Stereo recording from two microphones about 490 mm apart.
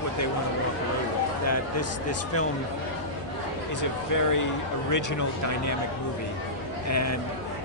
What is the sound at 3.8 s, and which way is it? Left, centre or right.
Speech, left.